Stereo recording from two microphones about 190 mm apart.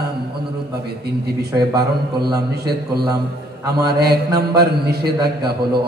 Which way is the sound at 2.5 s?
55° right (ahead or behind).